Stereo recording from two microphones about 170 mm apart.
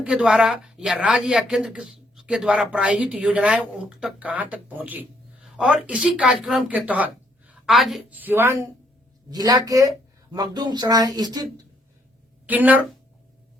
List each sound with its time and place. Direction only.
0.0 s speech: 5° right (ahead or behind); by 11.6 s 25° right (ahead or behind)
12.5 s speech: 10° right (ahead or behind)